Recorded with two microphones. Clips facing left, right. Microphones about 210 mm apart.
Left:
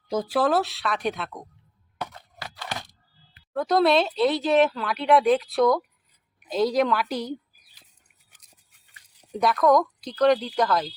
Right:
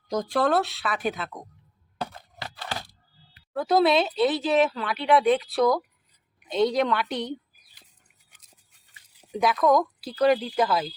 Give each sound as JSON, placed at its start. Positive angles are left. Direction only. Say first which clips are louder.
{"t": 0.1, "sound": "speech", "louder": "left 1 dB", "side_deg": 5}
{"t": 2.0, "sound": "a sound", "louder": "right 1 dB", "side_deg": -30}
{"t": 3.5, "sound": "speech", "louder": "left 1 dB", "side_deg": 0}
{"t": 9.3, "sound": "speech", "louder": "left 1 dB", "side_deg": 0}